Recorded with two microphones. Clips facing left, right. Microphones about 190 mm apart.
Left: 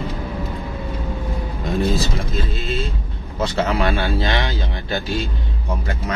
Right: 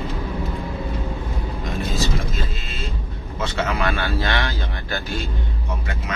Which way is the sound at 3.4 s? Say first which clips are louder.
Left 4 dB; 35° left (ahead or behind).